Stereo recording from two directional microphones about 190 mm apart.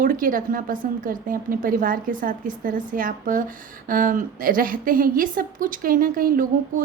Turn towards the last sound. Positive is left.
turn(degrees=-45)  # may be behind; listen again after turning